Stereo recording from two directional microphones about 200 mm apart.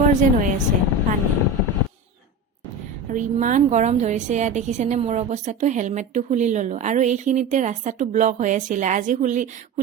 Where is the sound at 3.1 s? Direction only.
40° right (ahead or behind).